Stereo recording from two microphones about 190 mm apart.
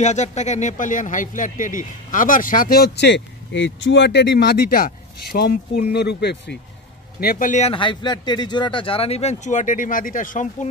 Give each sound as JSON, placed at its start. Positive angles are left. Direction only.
{"t": 0.0, "sound": "speech", "side_deg": 35}
{"t": 7.2, "sound": "speech", "side_deg": 50}